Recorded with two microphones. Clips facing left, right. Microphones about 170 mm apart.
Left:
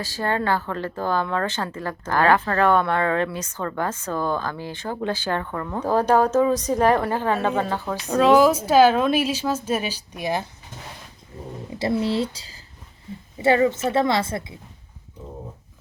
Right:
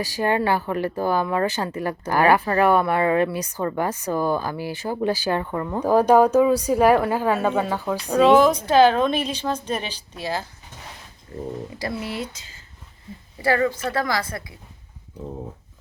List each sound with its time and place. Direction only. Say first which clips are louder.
0.0 s a woman's voice: right 3 dB; 15° right (ahead or behind); by 10.4 s 15° left (ahead or behind)
11.8 s a woman's voice: left 9 dB; 25° left (ahead or behind)
13.4 s a woman's voice: left 3 dB; 20° left (ahead or behind)